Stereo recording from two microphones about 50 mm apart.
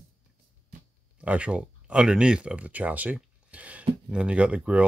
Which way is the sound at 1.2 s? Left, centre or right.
Right.